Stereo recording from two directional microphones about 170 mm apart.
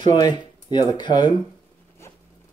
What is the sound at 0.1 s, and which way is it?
Speech, 25° left (ahead or behind).